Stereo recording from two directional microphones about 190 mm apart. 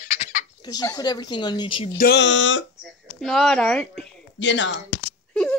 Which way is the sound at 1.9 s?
55° left (ahead or behind).